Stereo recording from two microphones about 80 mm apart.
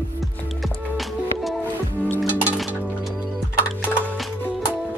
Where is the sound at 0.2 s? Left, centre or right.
Centre.